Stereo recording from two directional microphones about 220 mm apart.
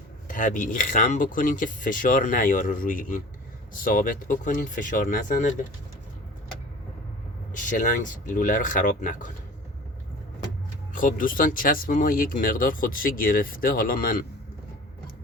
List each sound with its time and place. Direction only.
0.3 s speech: 35° left (ahead or behind)
7.5 s speech: 35° left (ahead or behind)
10.9 s speech: 40° left (ahead or behind)